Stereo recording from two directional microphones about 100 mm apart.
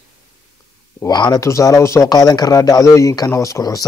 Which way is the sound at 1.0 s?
45° left (ahead or behind).